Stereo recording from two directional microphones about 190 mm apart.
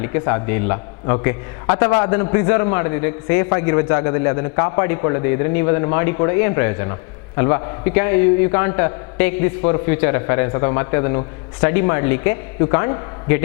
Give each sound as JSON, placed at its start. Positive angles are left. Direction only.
{"t": 0.0, "sound": "a man's voice", "side_deg": 15}